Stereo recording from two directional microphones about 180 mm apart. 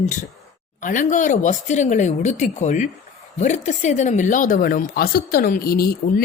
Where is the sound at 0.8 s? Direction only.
45° left (ahead or behind).